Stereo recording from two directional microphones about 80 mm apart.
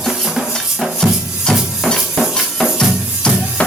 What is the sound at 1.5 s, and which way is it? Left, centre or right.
Music, centre.